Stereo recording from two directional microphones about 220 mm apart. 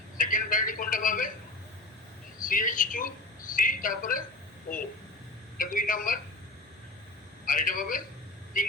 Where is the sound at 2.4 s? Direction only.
35° left (ahead or behind).